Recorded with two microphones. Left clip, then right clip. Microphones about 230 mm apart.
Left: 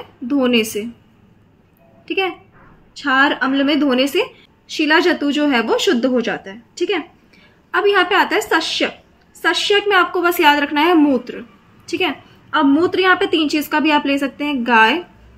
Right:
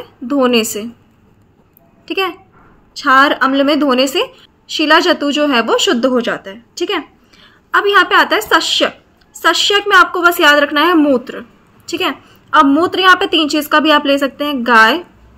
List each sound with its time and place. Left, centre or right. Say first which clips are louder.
0.3 s a woman's voice: right 4 dB; centre
2.0 s a child's voice: right 2 dB; centre